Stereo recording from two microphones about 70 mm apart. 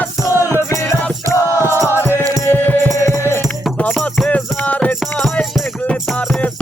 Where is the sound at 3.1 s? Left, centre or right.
Left.